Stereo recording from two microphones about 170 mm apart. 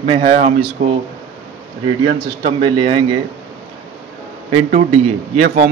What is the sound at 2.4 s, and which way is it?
Speech, 30° right (ahead or behind).